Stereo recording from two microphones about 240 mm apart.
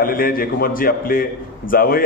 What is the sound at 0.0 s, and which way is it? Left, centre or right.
A man's voice, left.